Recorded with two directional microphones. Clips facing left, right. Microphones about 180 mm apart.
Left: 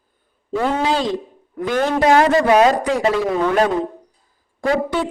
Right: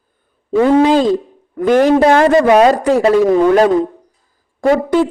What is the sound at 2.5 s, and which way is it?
Speech, 30° right (ahead or behind).